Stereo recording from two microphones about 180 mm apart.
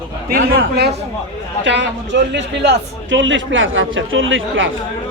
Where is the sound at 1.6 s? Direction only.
80° right.